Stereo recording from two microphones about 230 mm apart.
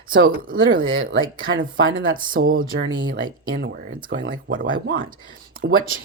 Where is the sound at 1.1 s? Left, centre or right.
Right.